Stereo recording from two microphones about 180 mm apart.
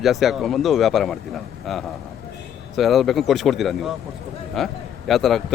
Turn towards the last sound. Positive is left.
turn(degrees=0)  # may be behind; listen again after turning